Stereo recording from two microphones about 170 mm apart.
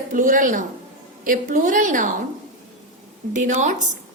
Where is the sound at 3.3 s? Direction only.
45° right (ahead or behind).